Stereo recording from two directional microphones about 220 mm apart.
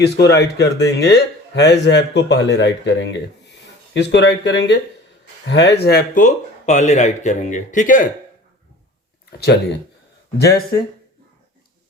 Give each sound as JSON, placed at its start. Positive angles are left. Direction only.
{"t": 0.0, "sound": "speech", "side_deg": 50}
{"t": 10.3, "sound": "speech", "side_deg": 45}